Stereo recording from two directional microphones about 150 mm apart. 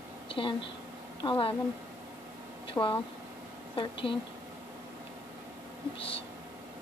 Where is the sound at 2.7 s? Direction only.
35° left (ahead or behind).